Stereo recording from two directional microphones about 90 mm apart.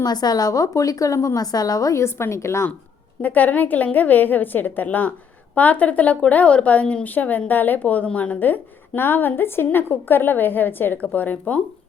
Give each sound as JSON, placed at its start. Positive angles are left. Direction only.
{"t": 0.0, "sound": "a woman's voice", "side_deg": 50}
{"t": 3.2, "sound": "a woman's voice", "side_deg": 20}